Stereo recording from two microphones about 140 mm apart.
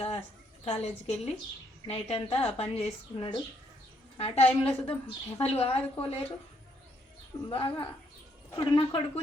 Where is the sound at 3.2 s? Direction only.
35° left (ahead or behind).